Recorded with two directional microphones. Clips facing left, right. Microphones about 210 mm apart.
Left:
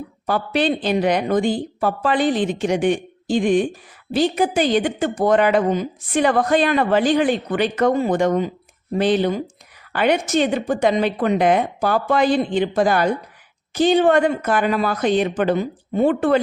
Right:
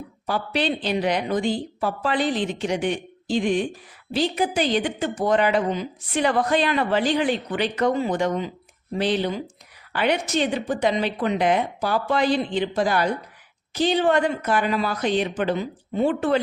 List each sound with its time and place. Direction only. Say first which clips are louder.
0.3 s a woman's voice: left 5 dB; 50° left (ahead or behind)